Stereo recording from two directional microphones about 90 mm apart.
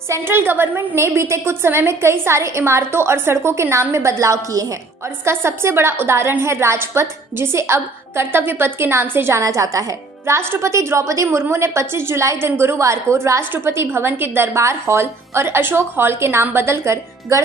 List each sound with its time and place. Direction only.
0.1 s a woman's voice: 25° right (ahead or behind)
9.4 s a woman's voice: 35° right (ahead or behind)